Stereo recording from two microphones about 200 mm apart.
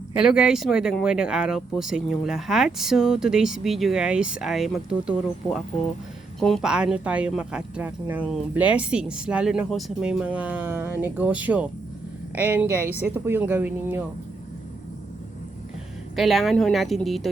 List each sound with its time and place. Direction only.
0.2 s speech: 5° right (ahead or behind)
16.1 s speech: centre (ahead or behind)